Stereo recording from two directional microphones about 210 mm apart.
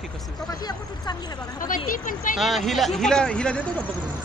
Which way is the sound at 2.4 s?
Centre (ahead or behind).